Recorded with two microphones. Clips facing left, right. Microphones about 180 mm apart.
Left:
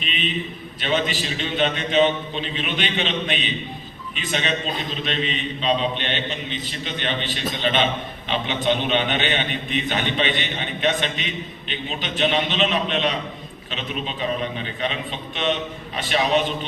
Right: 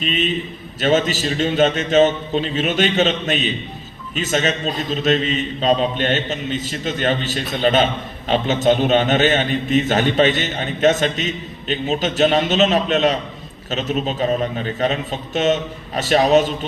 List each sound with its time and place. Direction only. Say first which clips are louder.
0.0 s a man's voice: right 6 dB; 45° right (ahead or behind)